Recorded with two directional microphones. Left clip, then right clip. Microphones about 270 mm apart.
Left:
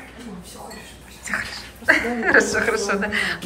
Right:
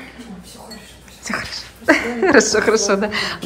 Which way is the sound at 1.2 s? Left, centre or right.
Centre.